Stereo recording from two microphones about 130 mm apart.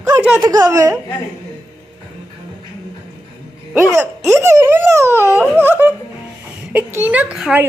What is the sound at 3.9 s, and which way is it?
Laughter, 20° right (ahead or behind).